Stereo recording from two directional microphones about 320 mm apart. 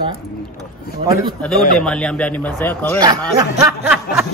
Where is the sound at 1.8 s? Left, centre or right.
Centre.